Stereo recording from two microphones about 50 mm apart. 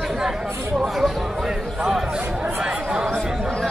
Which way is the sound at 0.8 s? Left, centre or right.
Centre.